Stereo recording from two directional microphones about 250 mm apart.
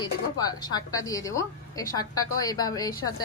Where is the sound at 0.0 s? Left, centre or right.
Centre.